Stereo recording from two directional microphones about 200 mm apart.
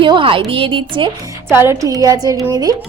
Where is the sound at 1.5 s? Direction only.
10° right (ahead or behind).